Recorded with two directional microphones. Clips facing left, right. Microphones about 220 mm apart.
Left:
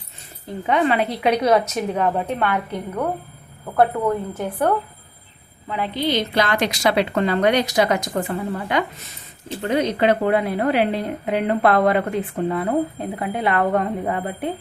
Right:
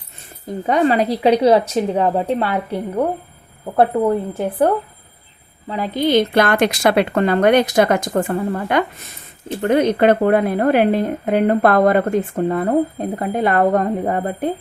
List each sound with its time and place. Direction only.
0.4 s a woman's voice: 40° right (ahead or behind)